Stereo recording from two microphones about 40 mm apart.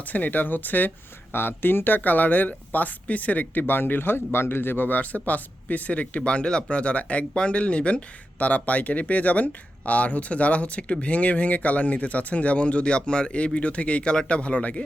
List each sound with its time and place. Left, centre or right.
0.0 s speech: left
1.3 s speech: left
4.9 s speech: left
8.4 s speech: left